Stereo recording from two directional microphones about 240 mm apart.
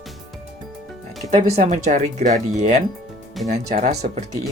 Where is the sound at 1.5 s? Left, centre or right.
Right.